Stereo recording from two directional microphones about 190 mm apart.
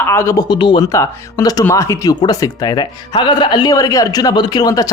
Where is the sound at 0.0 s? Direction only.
15° left (ahead or behind).